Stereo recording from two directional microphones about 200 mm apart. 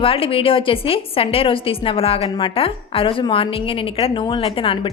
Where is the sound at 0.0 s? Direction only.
25° left (ahead or behind).